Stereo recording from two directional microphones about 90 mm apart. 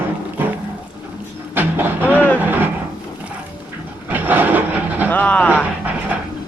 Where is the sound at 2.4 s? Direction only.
20° right (ahead or behind).